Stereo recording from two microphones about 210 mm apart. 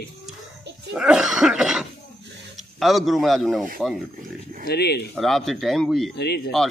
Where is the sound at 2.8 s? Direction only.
Centre (ahead or behind).